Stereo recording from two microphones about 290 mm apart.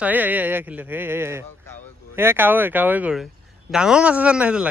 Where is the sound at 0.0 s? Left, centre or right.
Centre.